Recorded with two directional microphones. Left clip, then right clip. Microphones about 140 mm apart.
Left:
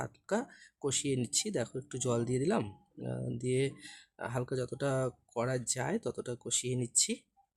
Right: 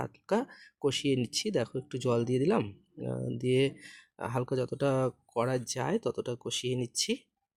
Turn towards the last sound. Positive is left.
turn(degrees=-20)  # may be behind; listen again after turning